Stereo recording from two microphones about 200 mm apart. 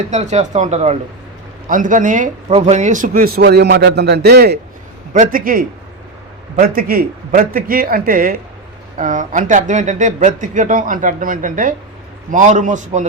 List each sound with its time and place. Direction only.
0.0 s speech: 35° right (ahead or behind); by 4.6 s 55° right (ahead or behind)
5.1 s speech: 45° right (ahead or behind)